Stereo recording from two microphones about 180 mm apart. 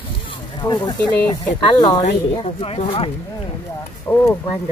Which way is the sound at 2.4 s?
35° left (ahead or behind).